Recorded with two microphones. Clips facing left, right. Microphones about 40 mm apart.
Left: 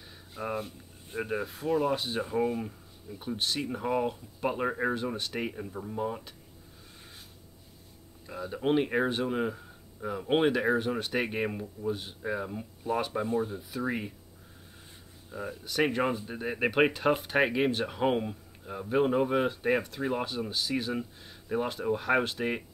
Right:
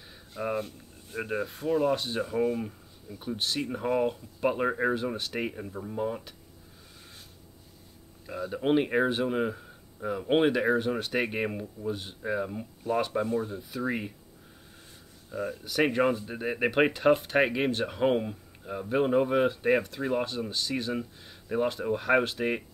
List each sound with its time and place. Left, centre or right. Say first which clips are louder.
0.0 s speech: right 3 dB; centre
8.3 s speech: right 2 dB; centre
15.3 s speech: right 2 dB; centre